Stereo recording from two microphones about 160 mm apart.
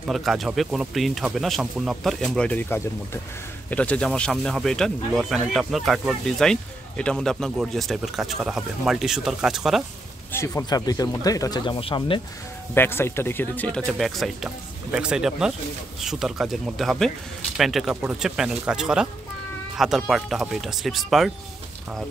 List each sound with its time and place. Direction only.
0.0 s speech: centre (ahead or behind)
10.3 s speech: 20° left (ahead or behind)
12.7 s speech: 15° left (ahead or behind)